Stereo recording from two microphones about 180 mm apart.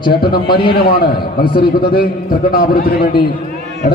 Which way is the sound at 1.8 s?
55° left (ahead or behind).